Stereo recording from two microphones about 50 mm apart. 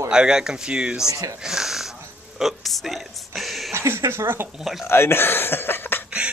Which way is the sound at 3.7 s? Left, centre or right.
Right.